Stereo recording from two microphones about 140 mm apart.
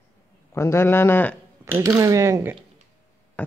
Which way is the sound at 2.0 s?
20° right (ahead or behind).